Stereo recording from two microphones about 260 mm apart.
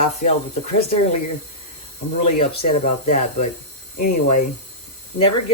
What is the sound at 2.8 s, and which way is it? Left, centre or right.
Speech, left.